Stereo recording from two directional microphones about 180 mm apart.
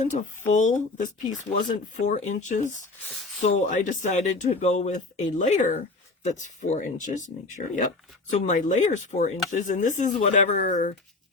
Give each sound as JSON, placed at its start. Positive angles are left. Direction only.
{"t": 0.0, "sound": "speech", "side_deg": 45}